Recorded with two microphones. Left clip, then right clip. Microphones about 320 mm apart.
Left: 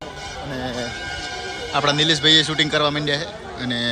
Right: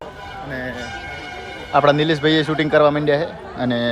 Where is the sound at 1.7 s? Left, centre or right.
Centre.